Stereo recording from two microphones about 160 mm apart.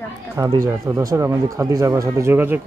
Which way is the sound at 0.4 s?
20° right (ahead or behind).